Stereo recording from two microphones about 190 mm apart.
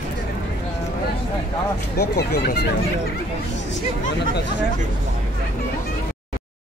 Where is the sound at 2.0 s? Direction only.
60° left (ahead or behind).